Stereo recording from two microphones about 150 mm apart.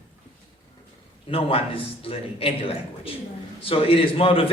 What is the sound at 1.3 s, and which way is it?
A man's voice, 40° left (ahead or behind).